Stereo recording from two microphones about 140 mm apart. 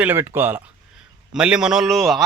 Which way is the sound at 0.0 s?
15° right (ahead or behind).